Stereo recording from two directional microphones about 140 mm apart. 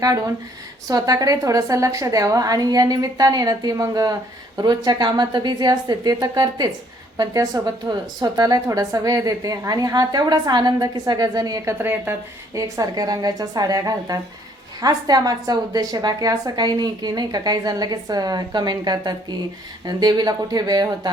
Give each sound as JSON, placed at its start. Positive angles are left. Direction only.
{"t": 0.9, "sound": "a woman's voice", "side_deg": -25}
{"t": 11.8, "sound": "a woman's voice", "side_deg": -15}